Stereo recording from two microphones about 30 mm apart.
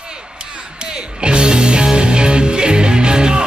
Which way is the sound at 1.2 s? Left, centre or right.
Right.